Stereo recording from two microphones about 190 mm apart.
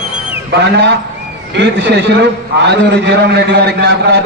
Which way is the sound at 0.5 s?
65° right (ahead or behind).